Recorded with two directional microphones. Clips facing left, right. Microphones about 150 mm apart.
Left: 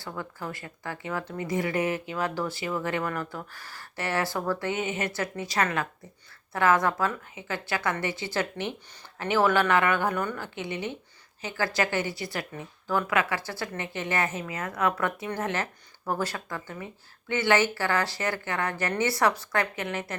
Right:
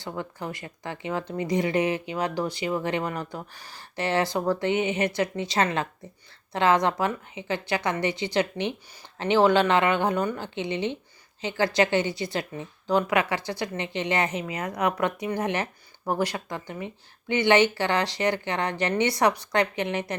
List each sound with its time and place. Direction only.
0.0 s a woman's voice: 20° right (ahead or behind)